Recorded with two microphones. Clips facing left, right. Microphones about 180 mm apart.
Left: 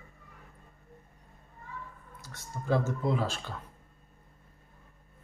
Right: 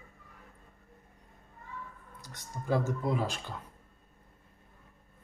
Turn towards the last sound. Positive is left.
turn(degrees=-10)  # may be behind; listen again after turning